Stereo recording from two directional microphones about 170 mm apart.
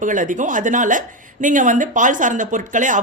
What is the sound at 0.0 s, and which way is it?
Speech, 50° right (ahead or behind).